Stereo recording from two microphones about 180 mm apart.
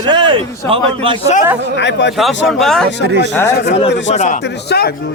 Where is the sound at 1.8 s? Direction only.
80° left.